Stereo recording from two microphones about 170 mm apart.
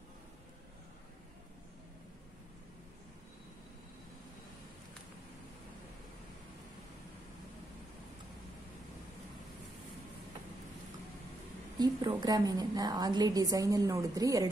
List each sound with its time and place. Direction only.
11.8 s a woman's voice: 25° right (ahead or behind)